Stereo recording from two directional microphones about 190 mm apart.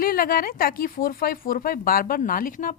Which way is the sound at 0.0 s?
50° left (ahead or behind).